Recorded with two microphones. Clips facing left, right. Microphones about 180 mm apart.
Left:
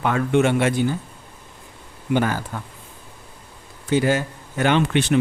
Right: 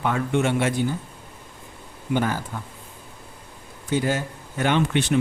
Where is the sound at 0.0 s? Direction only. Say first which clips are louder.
Left 4 dB; 75° left (ahead or behind).